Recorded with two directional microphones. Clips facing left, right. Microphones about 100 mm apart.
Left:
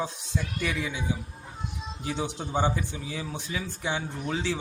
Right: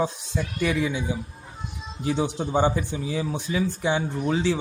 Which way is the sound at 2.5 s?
35° right (ahead or behind).